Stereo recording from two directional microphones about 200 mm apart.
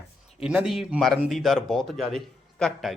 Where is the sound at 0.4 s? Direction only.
Centre (ahead or behind).